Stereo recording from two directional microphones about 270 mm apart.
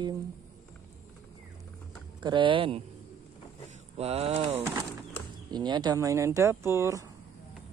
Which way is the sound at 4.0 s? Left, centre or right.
Right.